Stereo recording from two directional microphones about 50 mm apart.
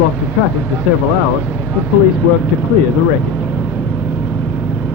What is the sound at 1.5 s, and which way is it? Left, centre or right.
Speech, right.